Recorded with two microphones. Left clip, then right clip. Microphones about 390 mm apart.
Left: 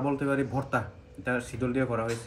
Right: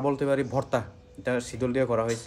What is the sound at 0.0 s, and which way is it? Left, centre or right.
A man's voice, centre.